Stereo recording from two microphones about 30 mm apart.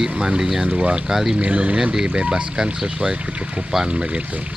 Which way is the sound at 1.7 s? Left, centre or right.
Right.